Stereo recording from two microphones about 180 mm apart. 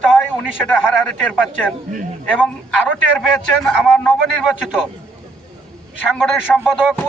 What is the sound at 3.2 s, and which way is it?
A man's voice, centre (ahead or behind).